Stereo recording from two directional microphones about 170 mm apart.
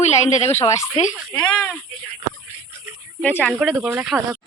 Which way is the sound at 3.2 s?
10° left (ahead or behind).